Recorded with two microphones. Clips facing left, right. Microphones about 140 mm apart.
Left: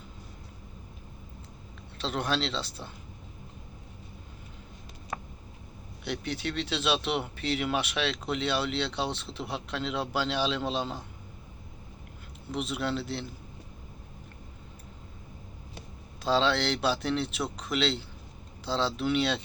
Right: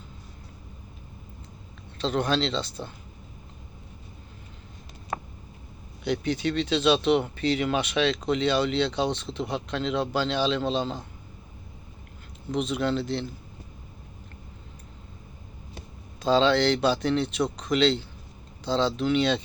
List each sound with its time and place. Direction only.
2.0 s speech: 5° left (ahead or behind)
5.1 s a sound: 50° right (ahead or behind)
6.1 s speech: centre (ahead or behind)
12.5 s speech: 5° left (ahead or behind)
16.2 s speech: 5° left (ahead or behind)